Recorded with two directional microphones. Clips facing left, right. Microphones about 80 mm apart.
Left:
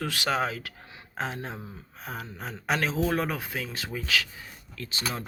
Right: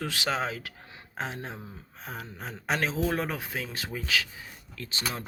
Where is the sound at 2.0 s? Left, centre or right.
Left.